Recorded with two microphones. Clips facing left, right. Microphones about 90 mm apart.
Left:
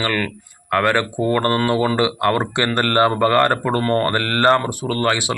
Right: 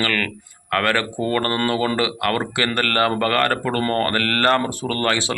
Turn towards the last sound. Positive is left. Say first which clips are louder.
# left 2 dB
turn(degrees=15)  # may be behind; listen again after turning